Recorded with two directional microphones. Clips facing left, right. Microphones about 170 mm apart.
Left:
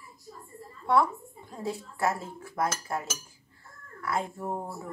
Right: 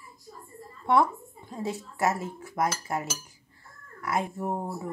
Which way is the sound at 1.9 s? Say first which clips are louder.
Right 3 dB; 20° right (ahead or behind).